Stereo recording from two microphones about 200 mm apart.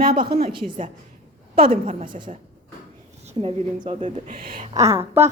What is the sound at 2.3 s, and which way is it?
A woman's voice, 35° right (ahead or behind).